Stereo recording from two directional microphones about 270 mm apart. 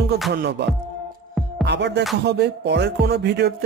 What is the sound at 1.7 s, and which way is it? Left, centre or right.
Music, right.